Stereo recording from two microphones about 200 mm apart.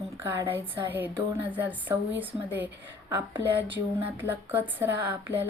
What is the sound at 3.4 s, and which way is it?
Speech, 60° right (ahead or behind).